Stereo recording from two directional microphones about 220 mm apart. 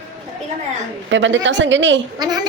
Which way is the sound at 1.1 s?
55° right (ahead or behind).